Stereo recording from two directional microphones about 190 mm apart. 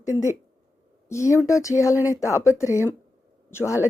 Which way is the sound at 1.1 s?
15° left (ahead or behind).